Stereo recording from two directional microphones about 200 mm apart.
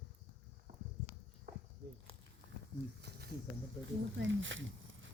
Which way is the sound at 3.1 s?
55° right (ahead or behind).